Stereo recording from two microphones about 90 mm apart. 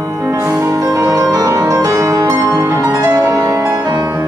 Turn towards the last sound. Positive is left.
turn(degrees=-45)  # may be behind; listen again after turning